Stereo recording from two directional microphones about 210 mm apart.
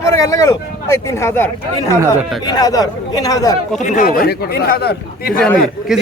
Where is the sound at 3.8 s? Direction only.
40° left (ahead or behind).